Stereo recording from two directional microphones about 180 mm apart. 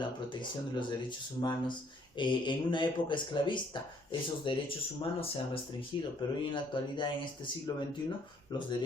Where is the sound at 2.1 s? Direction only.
25° left (ahead or behind).